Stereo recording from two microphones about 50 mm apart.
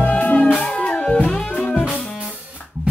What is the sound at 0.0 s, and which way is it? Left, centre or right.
Music, left.